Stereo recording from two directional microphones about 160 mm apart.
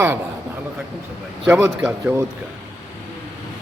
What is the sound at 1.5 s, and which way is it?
Speech, 10° right (ahead or behind).